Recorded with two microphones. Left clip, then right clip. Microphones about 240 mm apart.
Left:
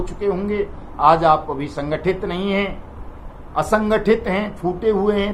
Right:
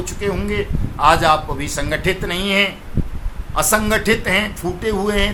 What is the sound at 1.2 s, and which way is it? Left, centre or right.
Music, right.